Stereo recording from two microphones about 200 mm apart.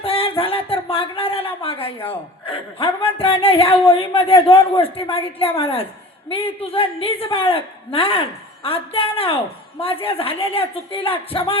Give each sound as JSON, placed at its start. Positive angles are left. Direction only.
{"t": 0.0, "sound": "a woman's voice", "side_deg": 25}